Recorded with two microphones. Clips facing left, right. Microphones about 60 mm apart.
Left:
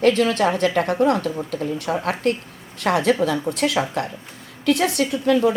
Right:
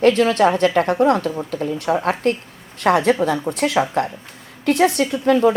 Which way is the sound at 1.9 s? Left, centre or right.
Right.